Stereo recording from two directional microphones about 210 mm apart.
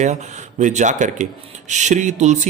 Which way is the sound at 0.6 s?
35° right (ahead or behind).